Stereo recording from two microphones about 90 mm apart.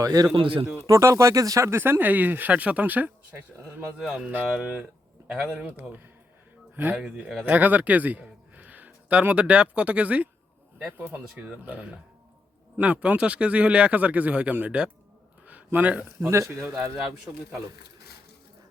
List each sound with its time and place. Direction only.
0.0 s a man's voice: 45° right (ahead or behind)
0.3 s speech: 75° right (ahead or behind)
0.9 s speech: 35° right (ahead or behind)
3.9 s a man's voice: 10° right (ahead or behind)
5.5 s speech: 20° right (ahead or behind)
6.9 s a man's voice: 5° right (ahead or behind)
16.3 s speech: 30° right (ahead or behind)